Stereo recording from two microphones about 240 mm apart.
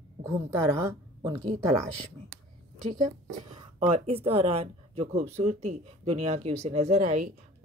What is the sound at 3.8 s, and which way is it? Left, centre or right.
Speech, right.